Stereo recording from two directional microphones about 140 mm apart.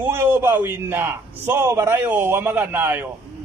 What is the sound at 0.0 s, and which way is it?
A man's voice, 15° right (ahead or behind).